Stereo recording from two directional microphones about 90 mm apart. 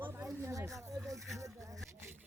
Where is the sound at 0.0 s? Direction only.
25° right (ahead or behind).